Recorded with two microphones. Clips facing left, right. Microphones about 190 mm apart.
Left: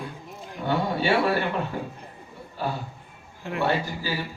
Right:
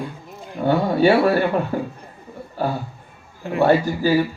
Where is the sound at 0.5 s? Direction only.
45° right (ahead or behind).